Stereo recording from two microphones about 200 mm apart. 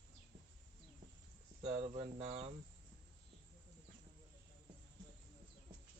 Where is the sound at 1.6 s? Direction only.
30° right (ahead or behind).